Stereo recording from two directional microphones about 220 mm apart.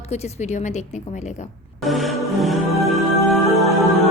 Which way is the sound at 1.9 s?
Centre (ahead or behind).